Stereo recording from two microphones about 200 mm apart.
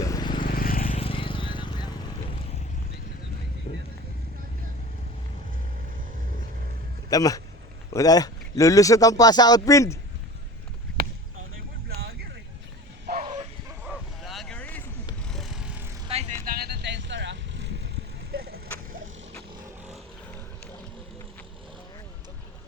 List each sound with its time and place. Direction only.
0.0 s vehicle: 20° left (ahead or behind)
0.4 s vehicle: 45° left (ahead or behind)
0.9 s vehicle: 25° left (ahead or behind)
7.1 s speech: 15° left (ahead or behind)
13.2 s bow-wow: 20° right (ahead or behind)
13.8 s boat: centre (ahead or behind)
15.3 s vehicle: centre (ahead or behind)
16.0 s vehicle: 30° right (ahead or behind)
16.5 s vehicle: 50° right (ahead or behind)
18.3 s a sound: 50° right (ahead or behind)